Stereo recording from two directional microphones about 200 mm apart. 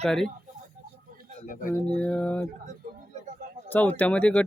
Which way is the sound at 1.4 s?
40° left (ahead or behind).